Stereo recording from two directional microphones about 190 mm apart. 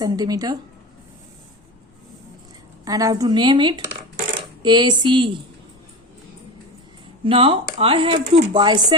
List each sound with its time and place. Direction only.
0.0 s speech: 20° right (ahead or behind)
2.8 s speech: 20° right (ahead or behind)
7.3 s speech: 30° right (ahead or behind)